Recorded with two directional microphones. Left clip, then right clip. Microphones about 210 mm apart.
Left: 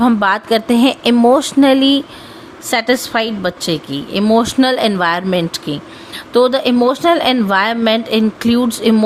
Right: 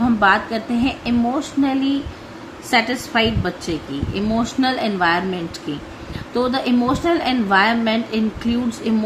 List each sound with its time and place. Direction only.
0.0 s a woman's voice: 50° left (ahead or behind)